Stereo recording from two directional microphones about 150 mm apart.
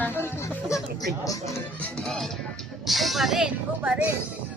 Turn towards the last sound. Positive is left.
turn(degrees=-10)  # may be behind; listen again after turning